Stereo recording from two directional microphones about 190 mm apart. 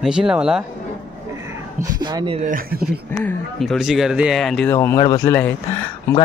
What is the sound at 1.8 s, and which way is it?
Speech, 20° right (ahead or behind).